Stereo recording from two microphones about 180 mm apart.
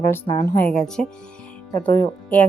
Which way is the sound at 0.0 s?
15° left (ahead or behind).